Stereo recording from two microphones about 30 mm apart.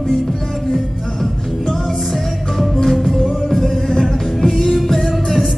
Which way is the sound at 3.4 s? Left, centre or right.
Centre.